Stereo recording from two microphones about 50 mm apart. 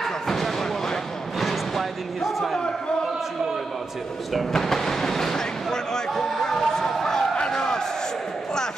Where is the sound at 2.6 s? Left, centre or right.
Centre.